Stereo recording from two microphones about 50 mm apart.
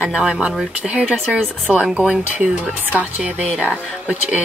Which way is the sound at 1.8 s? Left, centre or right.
Centre.